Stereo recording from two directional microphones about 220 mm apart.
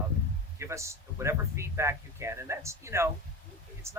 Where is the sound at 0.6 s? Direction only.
15° right (ahead or behind).